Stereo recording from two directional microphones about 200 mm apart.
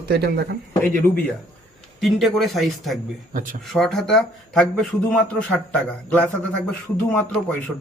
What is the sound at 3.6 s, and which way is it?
A man's voice, centre (ahead or behind).